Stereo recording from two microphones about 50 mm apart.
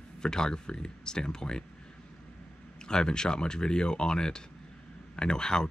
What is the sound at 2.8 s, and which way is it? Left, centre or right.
Speech, centre.